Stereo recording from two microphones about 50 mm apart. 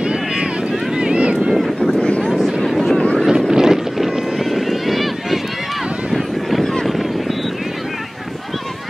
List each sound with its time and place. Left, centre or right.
0.0 s vehicle: centre
2.0 s vehicle: left
2.2 s vehicle: centre
3.3 s a sound: centre
6.6 s a sound: centre
6.9 s vehicle: centre